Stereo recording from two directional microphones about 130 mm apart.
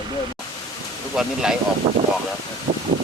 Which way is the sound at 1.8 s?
45° right (ahead or behind).